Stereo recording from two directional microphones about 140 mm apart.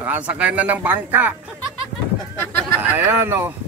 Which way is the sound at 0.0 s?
10° right (ahead or behind).